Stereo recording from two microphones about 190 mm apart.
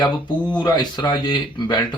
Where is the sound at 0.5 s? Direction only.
20° left (ahead or behind).